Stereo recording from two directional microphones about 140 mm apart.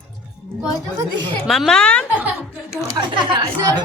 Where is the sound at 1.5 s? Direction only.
Centre (ahead or behind).